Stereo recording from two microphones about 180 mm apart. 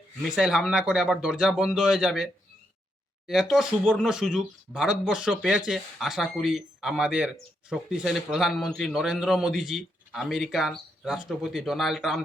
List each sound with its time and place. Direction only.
0.3 s a man's voice: 5° right (ahead or behind)